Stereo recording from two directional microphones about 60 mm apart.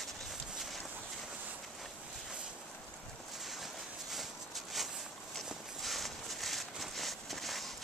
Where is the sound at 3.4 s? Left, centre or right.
Centre.